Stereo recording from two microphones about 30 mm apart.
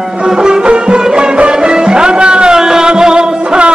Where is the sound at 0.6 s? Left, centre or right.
Right.